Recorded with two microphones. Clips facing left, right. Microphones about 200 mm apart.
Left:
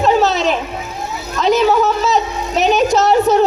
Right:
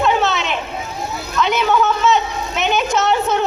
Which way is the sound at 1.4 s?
35° left (ahead or behind).